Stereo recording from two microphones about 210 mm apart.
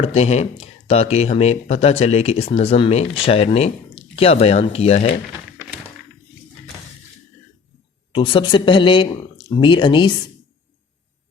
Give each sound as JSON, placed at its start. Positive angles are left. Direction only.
{"t": 0.0, "sound": "speech", "side_deg": 30}
{"t": 8.1, "sound": "speech", "side_deg": 25}